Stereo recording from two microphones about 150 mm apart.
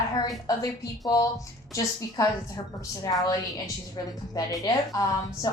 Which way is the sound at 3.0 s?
20° left (ahead or behind).